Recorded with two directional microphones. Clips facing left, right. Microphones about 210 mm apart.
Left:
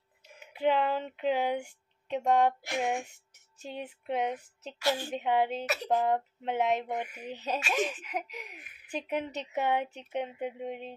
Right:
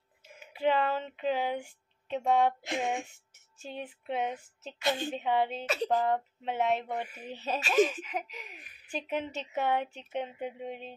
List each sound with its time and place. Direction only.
0.6 s speech: 10° left (ahead or behind)
2.6 s a woman's voice: 20° right (ahead or behind)
3.6 s speech: 10° left (ahead or behind)
4.7 s a woman's voice: 20° right (ahead or behind)
5.1 s speech: 15° left (ahead or behind)